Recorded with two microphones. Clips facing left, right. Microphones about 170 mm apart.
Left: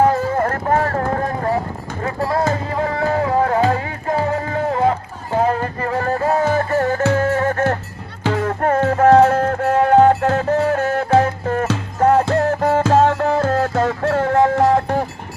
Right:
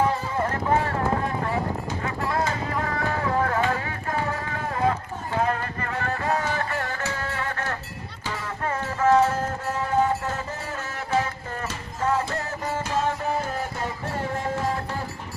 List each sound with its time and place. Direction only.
0.0 s music: 50° left (ahead or behind)
7.0 s music: 55° left (ahead or behind)